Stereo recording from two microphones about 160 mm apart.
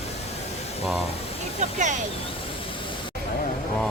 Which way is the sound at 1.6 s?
50° right (ahead or behind).